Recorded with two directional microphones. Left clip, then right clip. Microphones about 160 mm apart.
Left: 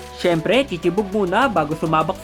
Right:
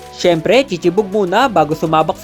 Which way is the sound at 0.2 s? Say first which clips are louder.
Right 6 dB; 20° right (ahead or behind).